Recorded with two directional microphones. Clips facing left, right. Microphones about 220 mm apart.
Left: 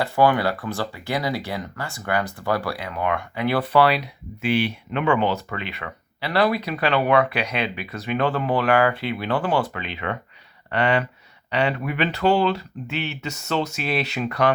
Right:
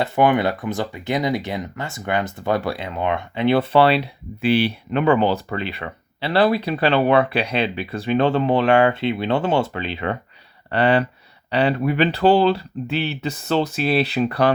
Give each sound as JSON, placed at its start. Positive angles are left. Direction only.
{"t": 0.0, "sound": "speech", "side_deg": -20}